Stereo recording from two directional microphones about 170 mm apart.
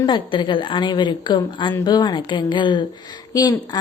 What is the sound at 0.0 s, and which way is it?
A woman's voice, 25° left (ahead or behind).